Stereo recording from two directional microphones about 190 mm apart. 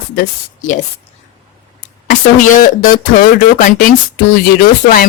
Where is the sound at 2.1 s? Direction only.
45° left (ahead or behind).